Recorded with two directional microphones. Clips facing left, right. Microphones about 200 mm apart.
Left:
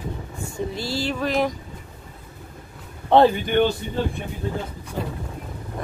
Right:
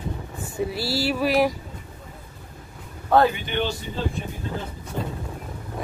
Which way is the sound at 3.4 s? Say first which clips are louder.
Left 7 dB; 50° left (ahead or behind).